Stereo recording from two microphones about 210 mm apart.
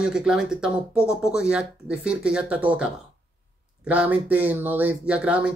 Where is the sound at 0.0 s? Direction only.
5° right (ahead or behind).